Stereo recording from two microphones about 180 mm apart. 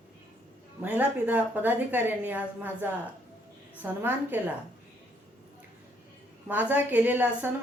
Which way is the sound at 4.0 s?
10° right (ahead or behind).